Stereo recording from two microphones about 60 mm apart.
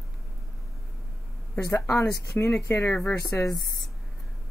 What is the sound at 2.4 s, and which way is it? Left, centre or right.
Speech, left.